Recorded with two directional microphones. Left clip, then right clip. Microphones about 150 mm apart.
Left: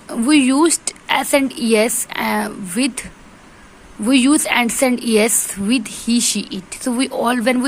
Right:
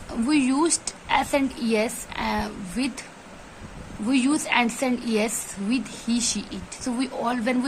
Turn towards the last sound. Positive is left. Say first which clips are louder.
# left 9 dB
turn(degrees=35)  # may be behind; listen again after turning